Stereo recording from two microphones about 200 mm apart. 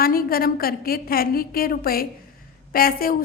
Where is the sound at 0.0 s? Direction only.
45° left (ahead or behind).